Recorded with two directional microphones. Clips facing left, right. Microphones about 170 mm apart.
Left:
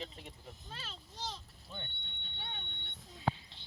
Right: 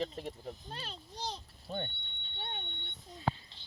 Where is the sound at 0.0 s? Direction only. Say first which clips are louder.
Right 9 dB; 40° right (ahead or behind).